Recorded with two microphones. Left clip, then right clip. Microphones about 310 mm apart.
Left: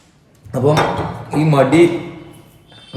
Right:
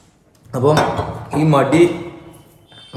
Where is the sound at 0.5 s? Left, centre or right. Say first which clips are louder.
Even; centre.